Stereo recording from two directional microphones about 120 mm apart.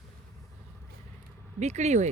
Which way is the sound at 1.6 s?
70° right (ahead or behind).